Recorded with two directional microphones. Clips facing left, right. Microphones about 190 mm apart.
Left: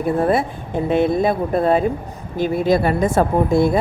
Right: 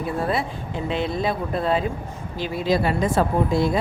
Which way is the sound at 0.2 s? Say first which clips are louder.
Left 6 dB; 50° left (ahead or behind).